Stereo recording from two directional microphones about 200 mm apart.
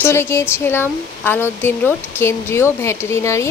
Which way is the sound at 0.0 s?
10° left (ahead or behind).